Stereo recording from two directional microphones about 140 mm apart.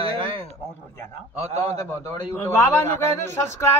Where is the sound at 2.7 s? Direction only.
15° left (ahead or behind).